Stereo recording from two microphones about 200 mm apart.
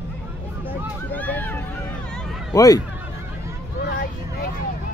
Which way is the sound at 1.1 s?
10° left (ahead or behind).